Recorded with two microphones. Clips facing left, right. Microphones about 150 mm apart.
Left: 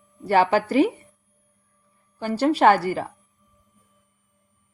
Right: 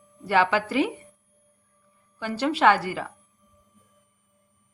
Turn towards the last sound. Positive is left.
turn(degrees=40)  # may be behind; listen again after turning